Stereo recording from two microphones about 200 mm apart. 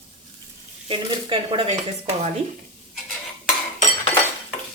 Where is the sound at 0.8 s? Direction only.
25° right (ahead or behind).